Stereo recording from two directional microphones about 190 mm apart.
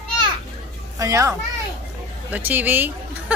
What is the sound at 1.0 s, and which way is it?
Speech, 15° right (ahead or behind).